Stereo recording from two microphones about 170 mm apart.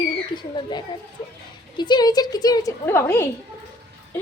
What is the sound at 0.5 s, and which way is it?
A woman's voice, 25° left (ahead or behind).